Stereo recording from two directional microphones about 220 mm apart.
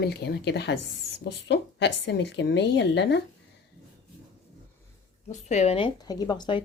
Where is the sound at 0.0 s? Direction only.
45° left (ahead or behind).